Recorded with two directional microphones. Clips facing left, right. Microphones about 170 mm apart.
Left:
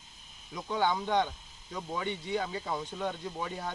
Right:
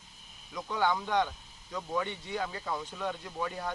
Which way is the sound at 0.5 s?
20° left (ahead or behind).